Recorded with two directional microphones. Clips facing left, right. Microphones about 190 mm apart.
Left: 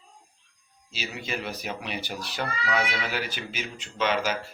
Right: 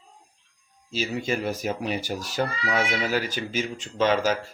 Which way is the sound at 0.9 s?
45° right (ahead or behind).